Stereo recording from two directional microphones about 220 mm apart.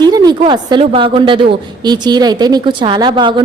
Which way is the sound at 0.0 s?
20° right (ahead or behind).